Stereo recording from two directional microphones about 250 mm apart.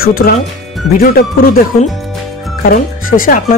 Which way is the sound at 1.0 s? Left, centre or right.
Left.